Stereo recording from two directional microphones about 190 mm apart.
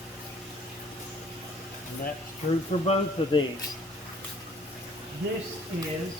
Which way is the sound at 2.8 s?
35° left (ahead or behind).